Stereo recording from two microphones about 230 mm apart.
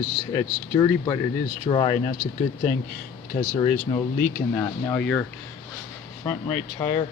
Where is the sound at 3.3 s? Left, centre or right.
Left.